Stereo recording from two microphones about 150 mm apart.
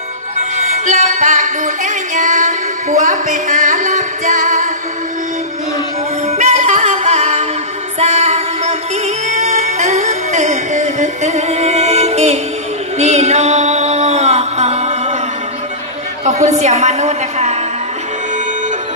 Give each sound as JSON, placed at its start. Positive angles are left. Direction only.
{"t": 0.8, "sound": "music", "side_deg": -50}
{"t": 6.2, "sound": "music", "side_deg": -50}
{"t": 16.3, "sound": "a sound", "side_deg": -50}